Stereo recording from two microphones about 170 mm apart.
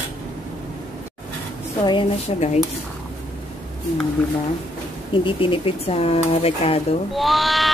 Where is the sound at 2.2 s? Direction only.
40° left (ahead or behind).